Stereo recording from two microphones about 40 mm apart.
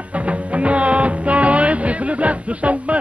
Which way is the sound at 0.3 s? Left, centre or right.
Right.